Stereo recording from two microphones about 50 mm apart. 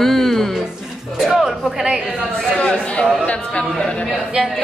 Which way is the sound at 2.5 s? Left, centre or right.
Left.